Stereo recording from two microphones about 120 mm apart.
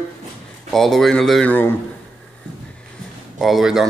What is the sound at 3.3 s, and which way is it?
Speech, centre (ahead or behind).